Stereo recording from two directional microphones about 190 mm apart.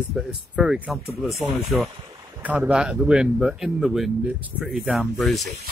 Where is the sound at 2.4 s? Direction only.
5° right (ahead or behind).